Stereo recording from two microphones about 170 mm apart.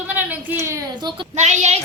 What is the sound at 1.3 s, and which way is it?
Speech, 45° right (ahead or behind).